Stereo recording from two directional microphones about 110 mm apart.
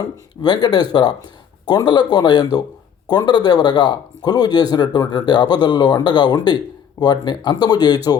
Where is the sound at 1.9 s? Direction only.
40° left (ahead or behind).